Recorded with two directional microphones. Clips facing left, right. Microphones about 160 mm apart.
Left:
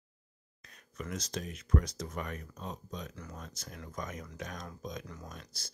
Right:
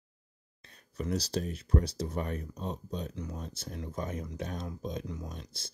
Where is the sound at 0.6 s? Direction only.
30° right (ahead or behind).